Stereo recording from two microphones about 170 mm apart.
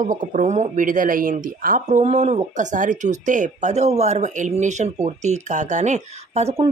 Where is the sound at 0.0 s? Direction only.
45° right (ahead or behind).